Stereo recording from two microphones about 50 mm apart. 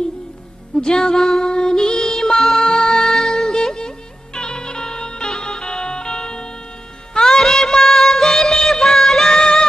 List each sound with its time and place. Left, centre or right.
0.7 s music: centre